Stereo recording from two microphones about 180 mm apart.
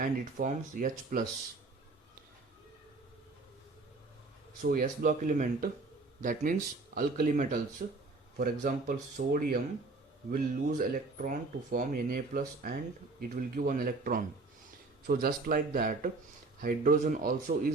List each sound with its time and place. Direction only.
0.0 s speech: 50° right (ahead or behind)
4.6 s a man's voice: 50° right (ahead or behind)